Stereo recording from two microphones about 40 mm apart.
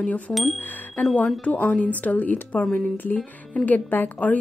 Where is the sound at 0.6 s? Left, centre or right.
Left.